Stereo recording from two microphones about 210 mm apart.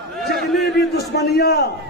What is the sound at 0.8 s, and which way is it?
Speech, 50° left (ahead or behind).